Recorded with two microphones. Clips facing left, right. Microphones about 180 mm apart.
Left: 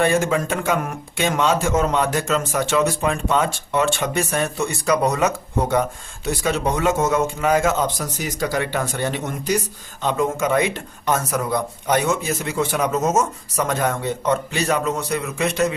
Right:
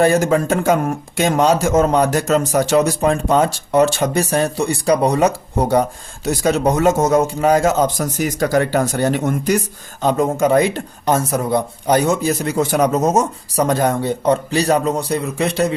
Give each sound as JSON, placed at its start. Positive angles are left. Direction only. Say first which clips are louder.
{"t": 0.0, "sound": "speech", "louder": "right 5 dB", "side_deg": -40}
{"t": 10.0, "sound": "speech", "louder": "right 5 dB", "side_deg": -40}